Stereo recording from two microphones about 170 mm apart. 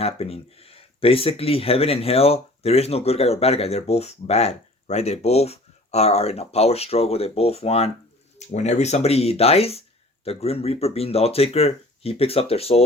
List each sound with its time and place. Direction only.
0.0 s speech: 35° left (ahead or behind)